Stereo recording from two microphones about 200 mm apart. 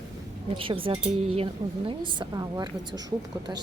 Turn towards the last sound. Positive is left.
turn(degrees=-20)  # may be behind; listen again after turning